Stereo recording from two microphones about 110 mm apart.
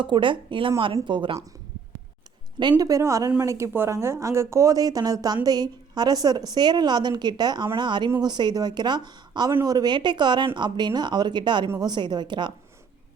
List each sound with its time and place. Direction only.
0.0 s speech: 50° right (ahead or behind)
2.6 s speech: 40° right (ahead or behind)